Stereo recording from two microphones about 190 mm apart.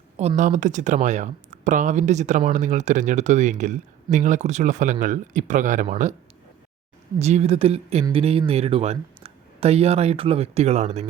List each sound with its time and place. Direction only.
0.2 s speech: 35° right (ahead or behind)
7.2 s speech: 35° right (ahead or behind)